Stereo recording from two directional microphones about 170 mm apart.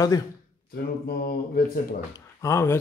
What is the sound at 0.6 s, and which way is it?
Speech, 60° left (ahead or behind).